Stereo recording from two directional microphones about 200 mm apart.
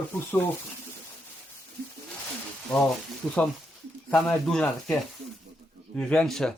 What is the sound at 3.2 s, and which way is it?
Speech, 5° left (ahead or behind).